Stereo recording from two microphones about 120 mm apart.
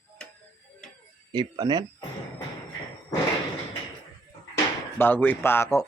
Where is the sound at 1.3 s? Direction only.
35° right (ahead or behind).